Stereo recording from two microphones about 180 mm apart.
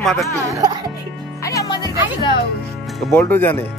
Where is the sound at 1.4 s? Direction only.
20° left (ahead or behind).